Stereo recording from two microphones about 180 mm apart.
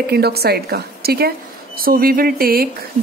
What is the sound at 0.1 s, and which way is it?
Speech, 60° right (ahead or behind).